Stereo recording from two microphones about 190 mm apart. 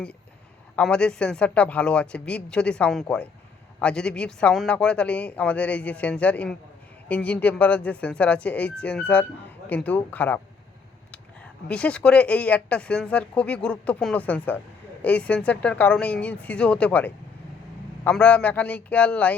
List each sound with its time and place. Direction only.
0.8 s a man's voice: 5° left (ahead or behind)